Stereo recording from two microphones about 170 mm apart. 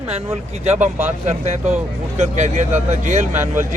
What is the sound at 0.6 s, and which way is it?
Speech, 40° right (ahead or behind).